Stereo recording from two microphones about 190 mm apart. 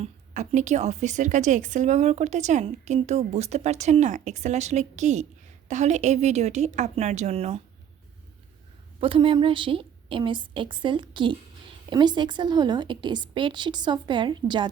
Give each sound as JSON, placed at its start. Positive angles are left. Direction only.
{"t": 0.0, "sound": "a woman's voice", "side_deg": -40}
{"t": 9.0, "sound": "a woman's voice", "side_deg": -30}